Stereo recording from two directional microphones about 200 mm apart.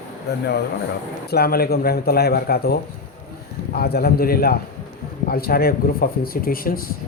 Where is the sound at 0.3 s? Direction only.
55° left (ahead or behind).